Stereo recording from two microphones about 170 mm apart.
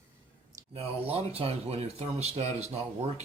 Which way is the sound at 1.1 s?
35° right (ahead or behind).